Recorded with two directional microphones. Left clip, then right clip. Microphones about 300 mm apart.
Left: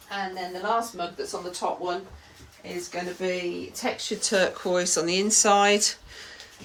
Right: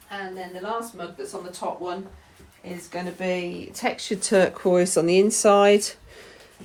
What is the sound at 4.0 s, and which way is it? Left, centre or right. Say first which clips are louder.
Speech: right 4 dB; right.